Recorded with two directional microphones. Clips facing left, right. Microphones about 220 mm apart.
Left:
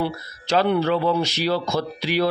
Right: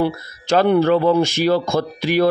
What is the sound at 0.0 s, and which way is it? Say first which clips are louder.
Speech: right 5 dB; 45° right (ahead or behind).